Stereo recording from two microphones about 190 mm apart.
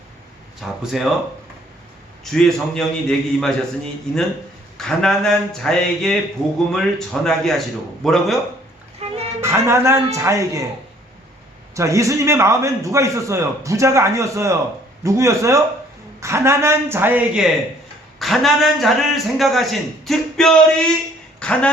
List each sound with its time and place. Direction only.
0.6 s a man's voice: centre (ahead or behind)
2.3 s a man's voice: centre (ahead or behind)
4.8 s a man's voice: centre (ahead or behind)
9.0 s a sound: 35° right (ahead or behind)
9.4 s a man's voice: 15° right (ahead or behind)
11.7 s a man's voice: 15° right (ahead or behind); by 20.9 s 5° left (ahead or behind)
21.3 s a sound: 5° left (ahead or behind)